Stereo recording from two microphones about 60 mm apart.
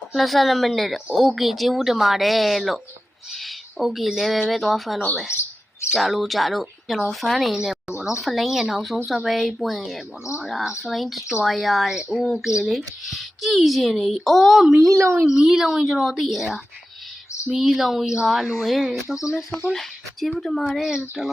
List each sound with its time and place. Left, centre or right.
0.1 s speech: centre
14.8 s speech: right
15.3 s speech: centre